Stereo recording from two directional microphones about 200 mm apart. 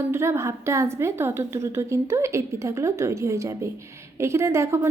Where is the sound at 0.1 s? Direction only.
15° right (ahead or behind).